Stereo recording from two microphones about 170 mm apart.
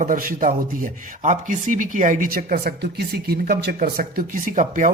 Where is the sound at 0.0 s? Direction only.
55° right (ahead or behind).